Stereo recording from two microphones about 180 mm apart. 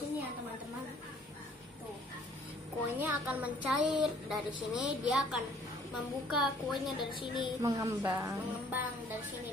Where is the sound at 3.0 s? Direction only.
10° right (ahead or behind).